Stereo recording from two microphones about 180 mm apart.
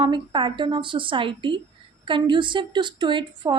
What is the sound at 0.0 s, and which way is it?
A woman's voice, 25° right (ahead or behind).